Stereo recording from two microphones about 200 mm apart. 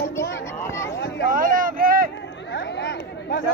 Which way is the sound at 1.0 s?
60° left (ahead or behind).